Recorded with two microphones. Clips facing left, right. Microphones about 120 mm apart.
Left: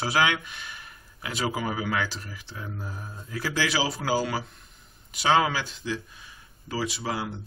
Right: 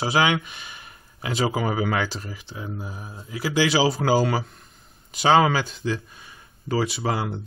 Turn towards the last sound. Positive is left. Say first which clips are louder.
# right 5 dB
turn(degrees=-50)  # may be behind; listen again after turning